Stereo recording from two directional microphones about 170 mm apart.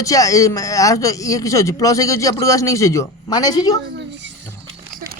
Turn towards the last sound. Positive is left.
turn(degrees=25)  # may be behind; listen again after turning